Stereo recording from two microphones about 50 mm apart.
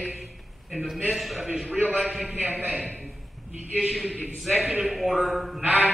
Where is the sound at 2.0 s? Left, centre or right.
Centre.